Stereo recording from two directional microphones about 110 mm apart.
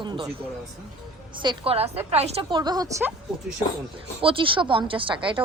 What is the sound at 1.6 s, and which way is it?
Speech, 65° right (ahead or behind).